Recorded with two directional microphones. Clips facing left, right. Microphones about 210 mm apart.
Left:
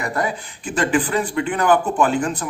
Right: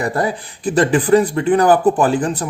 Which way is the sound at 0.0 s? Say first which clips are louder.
Right 4 dB; 35° right (ahead or behind).